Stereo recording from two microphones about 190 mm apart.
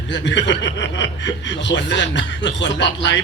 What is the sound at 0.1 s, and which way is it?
Speech, 70° left (ahead or behind).